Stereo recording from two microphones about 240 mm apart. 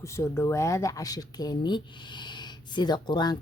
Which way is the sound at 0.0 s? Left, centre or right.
Centre.